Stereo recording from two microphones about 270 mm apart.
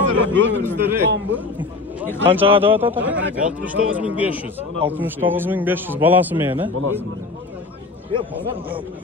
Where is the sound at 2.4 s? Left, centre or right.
Centre.